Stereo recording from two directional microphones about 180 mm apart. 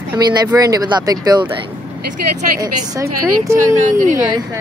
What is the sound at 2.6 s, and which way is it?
Speech, 15° right (ahead or behind).